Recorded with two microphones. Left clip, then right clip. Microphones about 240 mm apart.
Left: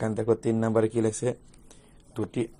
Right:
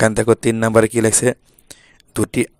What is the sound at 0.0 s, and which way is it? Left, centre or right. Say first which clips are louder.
Speech: right 11 dB; right.